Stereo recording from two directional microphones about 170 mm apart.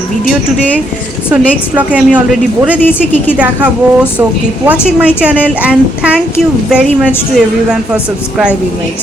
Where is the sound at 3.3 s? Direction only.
5° right (ahead or behind).